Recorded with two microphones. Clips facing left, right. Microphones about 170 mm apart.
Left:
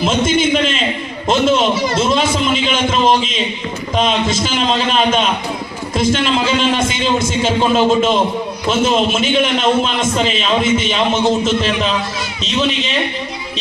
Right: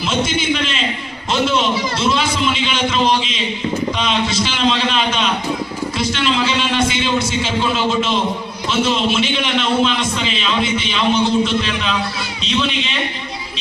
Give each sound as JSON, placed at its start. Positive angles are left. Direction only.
{"t": 0.0, "sound": "a man's voice", "side_deg": 45}
{"t": 1.3, "sound": "a sound", "side_deg": 45}
{"t": 3.9, "sound": "a man's voice", "side_deg": 45}